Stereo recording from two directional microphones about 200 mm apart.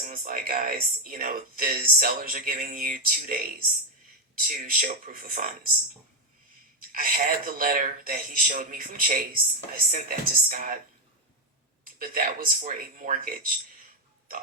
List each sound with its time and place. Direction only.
0.0 s speech: 45° right (ahead or behind)
6.9 s speech: 45° right (ahead or behind)
11.9 s speech: 45° right (ahead or behind)